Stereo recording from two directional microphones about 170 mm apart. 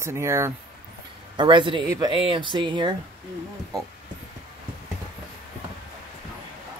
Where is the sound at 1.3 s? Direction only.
30° right (ahead or behind).